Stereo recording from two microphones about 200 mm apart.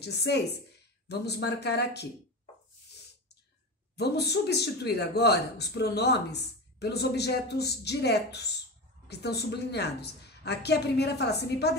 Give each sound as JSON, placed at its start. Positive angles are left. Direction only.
{"t": 0.0, "sound": "speech", "side_deg": 55}
{"t": 3.9, "sound": "speech", "side_deg": 55}